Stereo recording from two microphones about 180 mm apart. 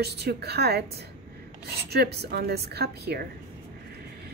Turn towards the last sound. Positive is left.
turn(degrees=-65)  # may be behind; listen again after turning